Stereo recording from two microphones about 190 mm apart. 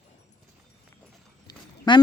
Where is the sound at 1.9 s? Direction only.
25° left (ahead or behind).